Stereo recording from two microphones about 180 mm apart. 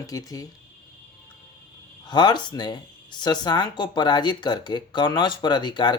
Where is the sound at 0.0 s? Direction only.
20° left (ahead or behind).